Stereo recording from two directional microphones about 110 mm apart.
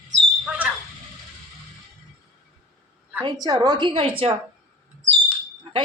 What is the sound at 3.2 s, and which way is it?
A woman's voice, 40° right (ahead or behind).